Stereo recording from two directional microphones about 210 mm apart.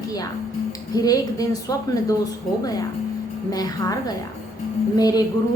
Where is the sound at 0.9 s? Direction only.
15° left (ahead or behind).